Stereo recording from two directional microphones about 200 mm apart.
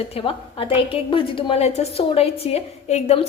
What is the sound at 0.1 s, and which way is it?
A woman's voice, 25° left (ahead or behind).